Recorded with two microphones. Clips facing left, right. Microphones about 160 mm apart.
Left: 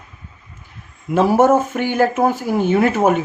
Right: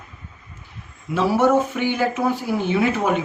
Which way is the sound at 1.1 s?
45° left (ahead or behind).